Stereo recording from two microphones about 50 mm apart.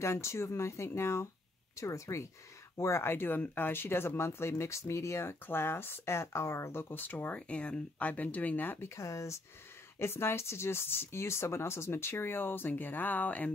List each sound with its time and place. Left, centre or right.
0.0 s speech: left
1.8 s speech: left
2.8 s speech: left
5.5 s speech: left
6.7 s speech: left
7.3 s speech: left
8.8 s speech: left
9.9 s speech: left